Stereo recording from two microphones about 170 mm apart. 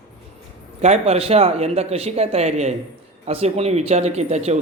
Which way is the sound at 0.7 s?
40° right (ahead or behind).